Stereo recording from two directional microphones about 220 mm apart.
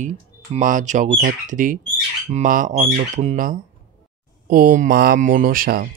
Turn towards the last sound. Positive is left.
turn(degrees=-40)  # may be behind; listen again after turning